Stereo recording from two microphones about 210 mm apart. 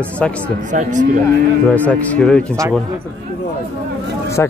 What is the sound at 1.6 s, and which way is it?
Speech, 5° left (ahead or behind).